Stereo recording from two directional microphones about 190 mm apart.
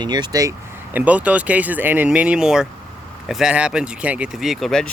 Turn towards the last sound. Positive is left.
turn(degrees=0)  # may be behind; listen again after turning